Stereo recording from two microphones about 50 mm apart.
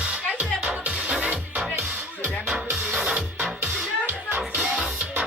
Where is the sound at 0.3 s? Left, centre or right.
Right.